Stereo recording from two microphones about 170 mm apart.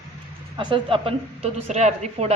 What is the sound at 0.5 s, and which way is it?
A woman's voice, 30° right (ahead or behind).